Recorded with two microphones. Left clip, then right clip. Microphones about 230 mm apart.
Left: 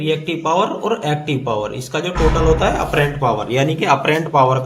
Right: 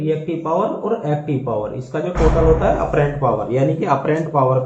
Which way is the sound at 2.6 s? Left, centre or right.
Left.